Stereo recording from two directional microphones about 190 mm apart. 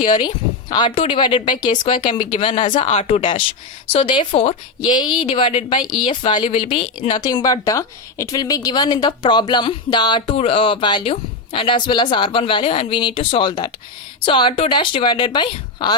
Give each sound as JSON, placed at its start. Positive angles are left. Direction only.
{"t": 0.0, "sound": "speech", "side_deg": 25}
{"t": 2.7, "sound": "speech", "side_deg": 35}